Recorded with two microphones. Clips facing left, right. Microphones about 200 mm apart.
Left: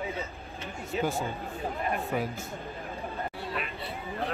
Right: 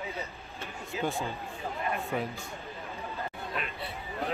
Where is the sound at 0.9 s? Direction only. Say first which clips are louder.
Left 3 dB; centre (ahead or behind).